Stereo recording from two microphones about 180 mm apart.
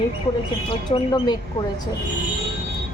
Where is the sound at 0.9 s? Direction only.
25° left (ahead or behind).